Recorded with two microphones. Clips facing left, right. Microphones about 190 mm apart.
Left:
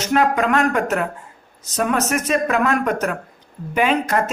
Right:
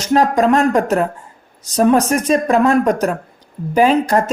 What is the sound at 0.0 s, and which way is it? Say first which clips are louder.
Speech: right 4 dB; 35° right (ahead or behind).